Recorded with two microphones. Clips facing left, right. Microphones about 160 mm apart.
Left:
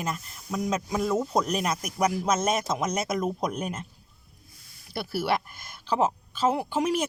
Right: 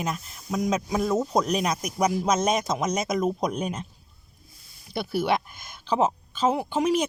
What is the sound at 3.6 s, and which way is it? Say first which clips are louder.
Speech: right 3 dB; 5° left (ahead or behind).